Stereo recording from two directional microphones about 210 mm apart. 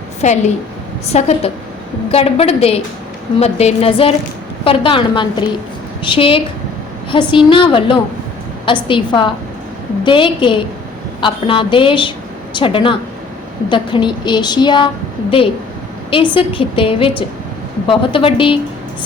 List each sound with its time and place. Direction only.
0.2 s a woman's voice: 35° left (ahead or behind)
16.0 s a woman's voice: 25° left (ahead or behind)